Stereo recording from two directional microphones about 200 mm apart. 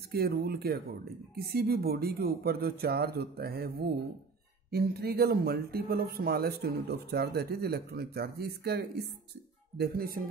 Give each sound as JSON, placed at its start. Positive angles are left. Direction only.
{"t": 0.1, "sound": "speech", "side_deg": -50}